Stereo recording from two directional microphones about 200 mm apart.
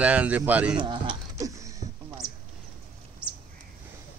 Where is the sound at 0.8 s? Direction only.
25° right (ahead or behind).